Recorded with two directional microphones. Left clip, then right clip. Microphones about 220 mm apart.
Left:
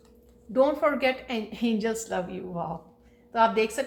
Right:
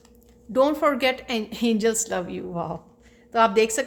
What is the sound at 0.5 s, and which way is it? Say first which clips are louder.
A woman's voice: right 3 dB; 45° right (ahead or behind).